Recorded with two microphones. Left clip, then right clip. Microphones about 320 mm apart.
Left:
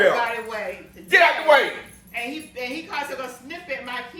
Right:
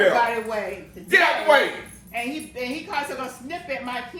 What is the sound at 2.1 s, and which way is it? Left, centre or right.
A woman's voice, centre.